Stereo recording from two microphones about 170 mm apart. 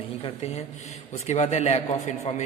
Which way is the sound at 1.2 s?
40° left (ahead or behind).